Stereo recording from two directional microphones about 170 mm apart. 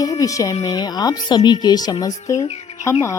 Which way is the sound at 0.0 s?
20° left (ahead or behind).